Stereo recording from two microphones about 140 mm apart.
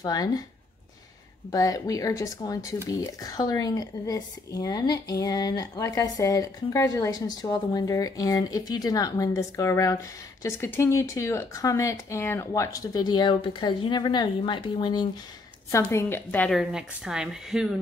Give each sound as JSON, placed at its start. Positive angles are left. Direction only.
{"t": 0.0, "sound": "speech", "side_deg": 30}
{"t": 1.5, "sound": "speech", "side_deg": 25}
{"t": 15.7, "sound": "a woman's voice", "side_deg": 20}
{"t": 16.5, "sound": "speech", "side_deg": -5}